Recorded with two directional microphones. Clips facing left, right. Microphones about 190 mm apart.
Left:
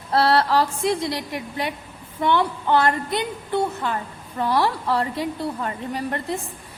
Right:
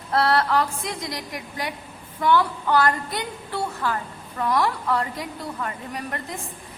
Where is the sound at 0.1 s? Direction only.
30° left (ahead or behind).